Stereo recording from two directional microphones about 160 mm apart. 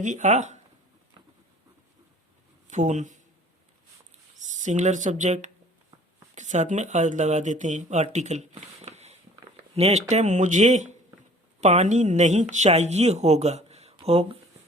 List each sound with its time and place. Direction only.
0.0 s speech: 50° right (ahead or behind)
2.6 s speech: 50° right (ahead or behind)
4.4 s speech: 50° right (ahead or behind)